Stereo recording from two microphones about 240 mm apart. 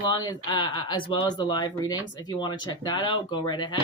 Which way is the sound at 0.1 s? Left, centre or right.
Centre.